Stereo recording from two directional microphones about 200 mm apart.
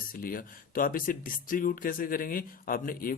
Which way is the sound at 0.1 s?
45° left (ahead or behind).